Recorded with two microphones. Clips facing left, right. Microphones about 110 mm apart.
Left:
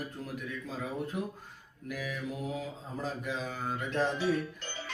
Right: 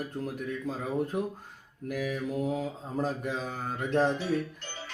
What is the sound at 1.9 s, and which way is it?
Mantra, 45° right (ahead or behind).